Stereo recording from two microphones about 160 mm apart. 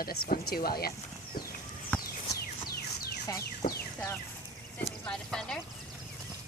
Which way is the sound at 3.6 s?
45° left (ahead or behind).